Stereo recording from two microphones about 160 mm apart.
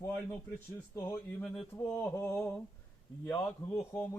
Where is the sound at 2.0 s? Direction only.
15° left (ahead or behind).